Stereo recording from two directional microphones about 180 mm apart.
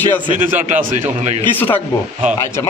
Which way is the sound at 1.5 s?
10° left (ahead or behind).